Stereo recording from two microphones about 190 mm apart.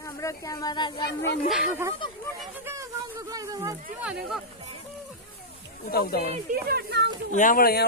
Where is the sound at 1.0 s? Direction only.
55° left (ahead or behind).